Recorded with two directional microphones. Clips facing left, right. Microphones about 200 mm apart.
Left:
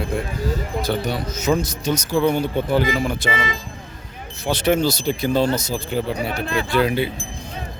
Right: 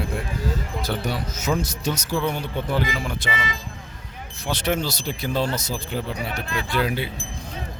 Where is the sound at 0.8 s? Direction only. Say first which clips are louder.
Left 3 dB; 10° right (ahead or behind).